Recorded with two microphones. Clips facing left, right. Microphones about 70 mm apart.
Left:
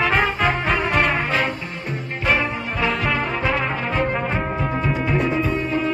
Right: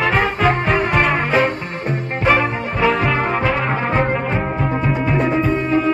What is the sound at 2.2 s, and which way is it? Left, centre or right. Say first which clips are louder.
Brass instrument: right 5 dB; right.